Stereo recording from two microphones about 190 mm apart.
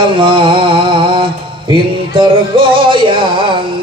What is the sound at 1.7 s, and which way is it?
Music, 25° right (ahead or behind).